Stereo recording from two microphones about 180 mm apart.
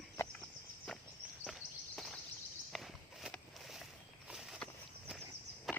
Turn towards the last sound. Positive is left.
turn(degrees=0)  # may be behind; listen again after turning